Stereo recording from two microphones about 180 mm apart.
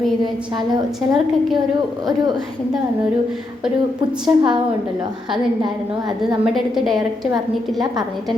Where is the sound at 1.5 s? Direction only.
25° right (ahead or behind).